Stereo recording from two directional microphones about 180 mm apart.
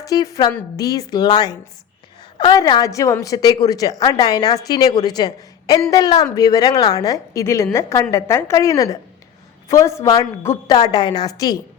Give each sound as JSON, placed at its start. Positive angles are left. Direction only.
{"t": 0.0, "sound": "a woman's voice", "side_deg": 20}